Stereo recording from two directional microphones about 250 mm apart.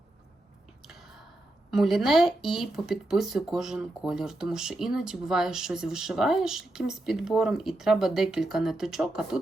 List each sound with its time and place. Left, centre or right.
1.7 s speech: centre